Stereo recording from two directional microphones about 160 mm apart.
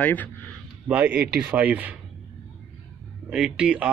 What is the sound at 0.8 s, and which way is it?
Speech, 10° right (ahead or behind).